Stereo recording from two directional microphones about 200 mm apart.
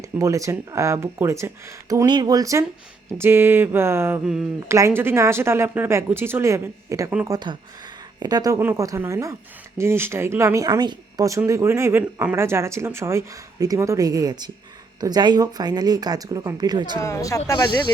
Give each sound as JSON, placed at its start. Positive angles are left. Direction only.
{"t": 0.0, "sound": "speech", "side_deg": -15}
{"t": 7.3, "sound": "speech", "side_deg": -20}
{"t": 17.0, "sound": "speech", "side_deg": 15}